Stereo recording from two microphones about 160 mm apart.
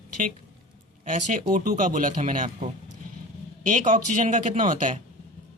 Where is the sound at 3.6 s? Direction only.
50° right (ahead or behind).